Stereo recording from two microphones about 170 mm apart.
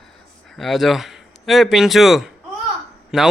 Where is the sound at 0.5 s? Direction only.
Centre (ahead or behind).